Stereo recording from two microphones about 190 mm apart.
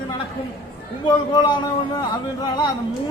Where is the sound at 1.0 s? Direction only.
20° left (ahead or behind).